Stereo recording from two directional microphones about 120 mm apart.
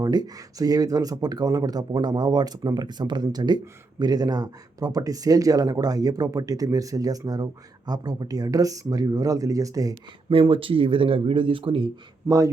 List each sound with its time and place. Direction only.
0.0 s speech: 35° right (ahead or behind)
10.2 s speech: 45° right (ahead or behind)